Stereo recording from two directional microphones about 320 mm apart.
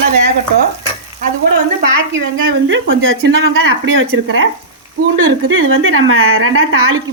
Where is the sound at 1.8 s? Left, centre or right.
Right.